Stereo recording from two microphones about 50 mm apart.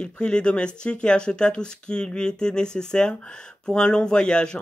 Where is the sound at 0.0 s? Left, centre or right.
Centre.